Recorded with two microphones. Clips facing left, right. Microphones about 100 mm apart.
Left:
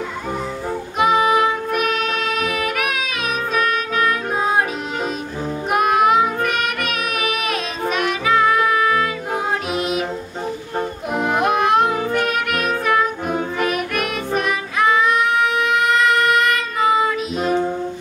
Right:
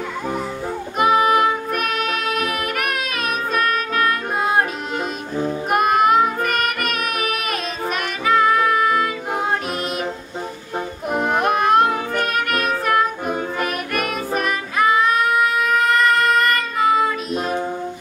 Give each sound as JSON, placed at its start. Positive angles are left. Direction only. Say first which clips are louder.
{"t": 0.9, "sound": "music", "louder": "even", "side_deg": 0}
{"t": 5.7, "sound": "music", "louder": "left 1 dB", "side_deg": 0}
{"t": 11.1, "sound": "music", "louder": "even", "side_deg": 0}